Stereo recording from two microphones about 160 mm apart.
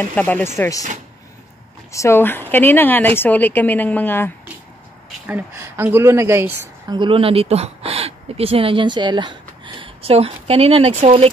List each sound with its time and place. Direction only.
0.0 s a woman's voice: 10° left (ahead or behind)
1.9 s a woman's voice: 15° left (ahead or behind)
5.2 s a woman's voice: 10° right (ahead or behind)
7.0 s speech: 35° right (ahead or behind)